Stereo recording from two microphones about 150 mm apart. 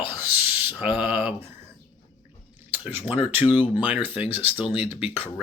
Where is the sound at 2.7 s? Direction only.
10° right (ahead or behind).